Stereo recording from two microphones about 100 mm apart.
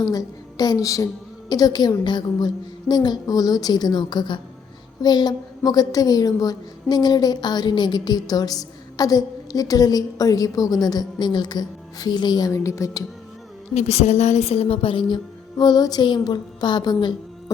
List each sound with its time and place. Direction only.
0.0 s a woman's voice: 40° left (ahead or behind)
13.7 s a woman's voice: 90° left; by 15.0 s 65° left (ahead or behind)
15.1 s a woman's voice: 45° left (ahead or behind)